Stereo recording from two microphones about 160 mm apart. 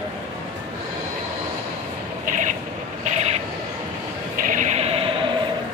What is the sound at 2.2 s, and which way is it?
Vehicle, 50° right (ahead or behind).